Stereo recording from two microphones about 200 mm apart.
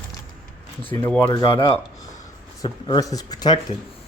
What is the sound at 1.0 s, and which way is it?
Speech, 10° left (ahead or behind).